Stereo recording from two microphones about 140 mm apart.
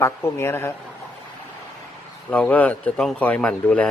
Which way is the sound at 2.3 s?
10° left (ahead or behind).